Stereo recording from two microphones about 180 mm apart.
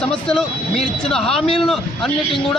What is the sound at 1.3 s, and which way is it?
Speech, 30° left (ahead or behind).